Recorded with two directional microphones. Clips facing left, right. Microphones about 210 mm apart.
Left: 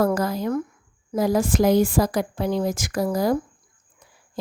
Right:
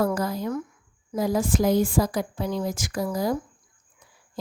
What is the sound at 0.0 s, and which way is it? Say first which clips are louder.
A woman's voice: left 3 dB; 90° left.